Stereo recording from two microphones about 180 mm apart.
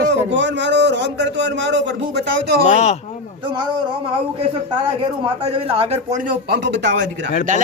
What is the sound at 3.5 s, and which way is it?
Speech, 25° right (ahead or behind).